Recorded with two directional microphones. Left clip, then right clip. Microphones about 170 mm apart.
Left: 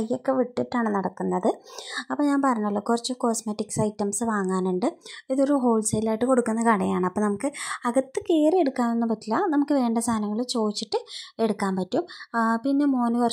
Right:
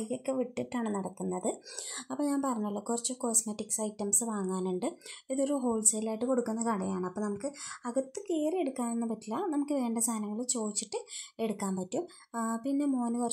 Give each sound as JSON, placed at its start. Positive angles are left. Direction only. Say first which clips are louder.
{"t": 0.9, "sound": "speech", "louder": "left 10 dB", "side_deg": 25}